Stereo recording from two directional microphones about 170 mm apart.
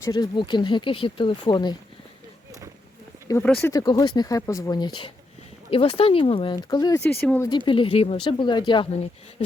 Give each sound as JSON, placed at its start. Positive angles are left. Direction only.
{"t": 0.0, "sound": "speech", "side_deg": 25}
{"t": 3.4, "sound": "speech", "side_deg": 10}
{"t": 3.7, "sound": "speech", "side_deg": 20}
{"t": 7.7, "sound": "speech", "side_deg": 30}